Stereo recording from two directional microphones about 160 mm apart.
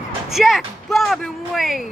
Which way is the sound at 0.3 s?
Centre (ahead or behind).